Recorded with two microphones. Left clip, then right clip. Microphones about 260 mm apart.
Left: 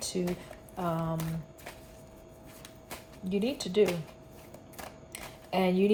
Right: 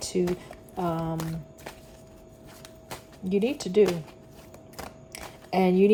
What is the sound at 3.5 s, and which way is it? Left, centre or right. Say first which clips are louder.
Speech: right 4 dB; right.